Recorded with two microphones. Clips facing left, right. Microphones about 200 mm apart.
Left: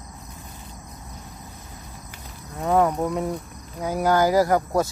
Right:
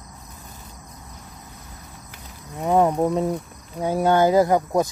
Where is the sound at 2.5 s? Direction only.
25° right (ahead or behind).